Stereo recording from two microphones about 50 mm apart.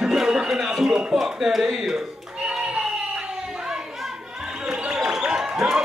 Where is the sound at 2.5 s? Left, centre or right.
Centre.